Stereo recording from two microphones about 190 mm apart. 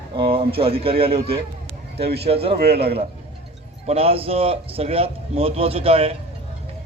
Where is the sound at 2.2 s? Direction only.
30° right (ahead or behind).